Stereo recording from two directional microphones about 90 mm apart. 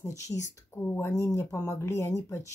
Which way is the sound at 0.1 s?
40° left (ahead or behind).